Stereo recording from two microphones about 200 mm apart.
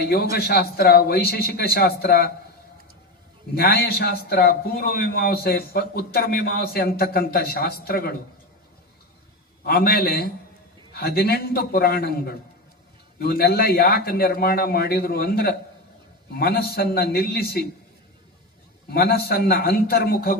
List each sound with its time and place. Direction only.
0.0 s a man's voice: 50° left (ahead or behind)
3.5 s a man's voice: 50° left (ahead or behind)
9.6 s a man's voice: 50° left (ahead or behind)
18.9 s a man's voice: 50° left (ahead or behind)